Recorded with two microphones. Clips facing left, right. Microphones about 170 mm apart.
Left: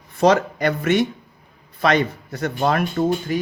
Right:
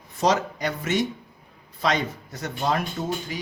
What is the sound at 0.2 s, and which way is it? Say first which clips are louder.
Speech: left 6 dB; 60° left (ahead or behind).